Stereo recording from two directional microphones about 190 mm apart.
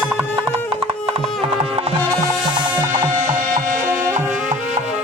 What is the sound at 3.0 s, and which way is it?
Music, 40° right (ahead or behind).